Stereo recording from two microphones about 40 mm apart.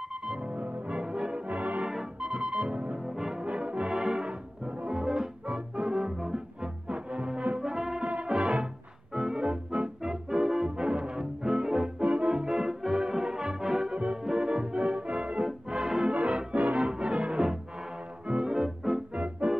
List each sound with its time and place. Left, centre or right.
0.4 s music: right
1.5 s brass instrument: right
2.1 s music: right
3.2 s brass instrument: centre
3.4 s brass instrument: right
4.0 s music: centre
8.0 s music: right
12.0 s music: right
16.2 s brass instrument: right
18.2 s music: right
18.5 s music: centre
19.4 s music: right